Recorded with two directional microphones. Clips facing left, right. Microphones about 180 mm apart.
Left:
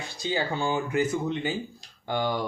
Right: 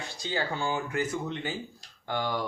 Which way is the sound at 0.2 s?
15° left (ahead or behind).